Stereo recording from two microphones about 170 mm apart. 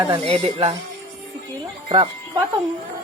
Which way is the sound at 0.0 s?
30° right (ahead or behind).